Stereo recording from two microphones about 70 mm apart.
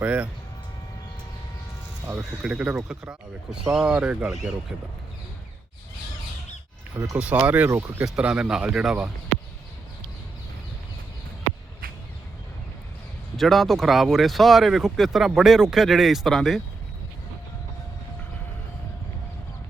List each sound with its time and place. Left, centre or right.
0.0 s a sound: right
2.1 s speech: centre
7.2 s speech: centre
8.0 s speech: centre
13.3 s speech: centre